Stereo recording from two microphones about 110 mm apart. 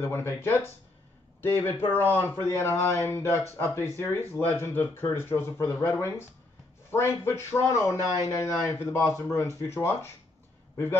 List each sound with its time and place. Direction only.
0.0 s a man's voice: 20° left (ahead or behind)